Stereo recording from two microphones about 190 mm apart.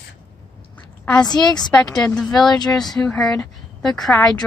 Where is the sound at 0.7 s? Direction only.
5° left (ahead or behind).